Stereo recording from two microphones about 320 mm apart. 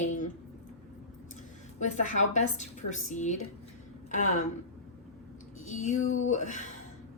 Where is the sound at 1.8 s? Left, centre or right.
Left.